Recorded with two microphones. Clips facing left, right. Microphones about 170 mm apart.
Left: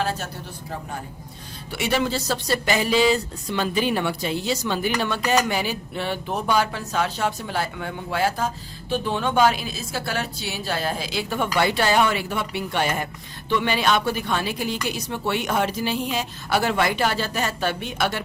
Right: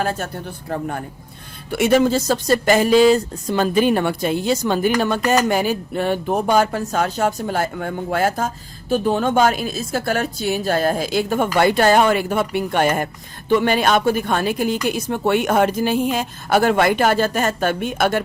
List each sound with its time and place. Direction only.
0.0 s a man's voice: 50° right (ahead or behind)